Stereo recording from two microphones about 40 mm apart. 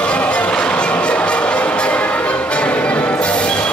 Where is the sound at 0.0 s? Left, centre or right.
Left.